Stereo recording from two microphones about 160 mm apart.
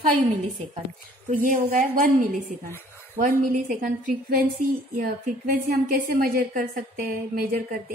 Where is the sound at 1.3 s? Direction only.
55° right (ahead or behind).